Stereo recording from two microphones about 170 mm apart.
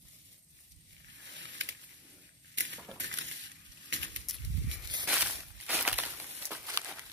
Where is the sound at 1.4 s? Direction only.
90° right.